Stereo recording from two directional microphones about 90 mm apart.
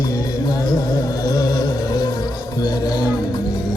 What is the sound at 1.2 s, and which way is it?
Music, 45° left (ahead or behind).